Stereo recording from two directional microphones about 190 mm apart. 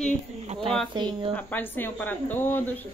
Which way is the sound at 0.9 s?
25° right (ahead or behind).